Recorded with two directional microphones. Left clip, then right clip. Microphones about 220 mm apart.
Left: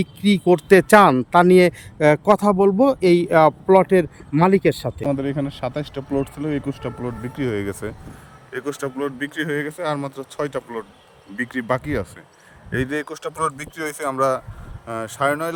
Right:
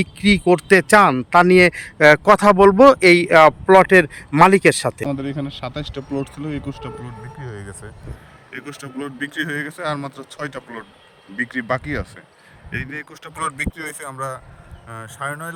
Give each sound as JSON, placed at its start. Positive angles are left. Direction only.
{"t": 0.0, "sound": "speech", "side_deg": 0}
{"t": 5.0, "sound": "a man's voice", "side_deg": 10}
{"t": 7.5, "sound": "speech", "side_deg": 55}
{"t": 8.5, "sound": "a man's voice", "side_deg": 30}
{"t": 12.7, "sound": "speech", "side_deg": 35}